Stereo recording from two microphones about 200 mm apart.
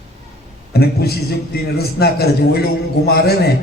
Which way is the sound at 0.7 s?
50° left (ahead or behind).